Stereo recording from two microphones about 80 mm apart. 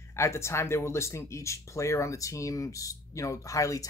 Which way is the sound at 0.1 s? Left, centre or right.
Left.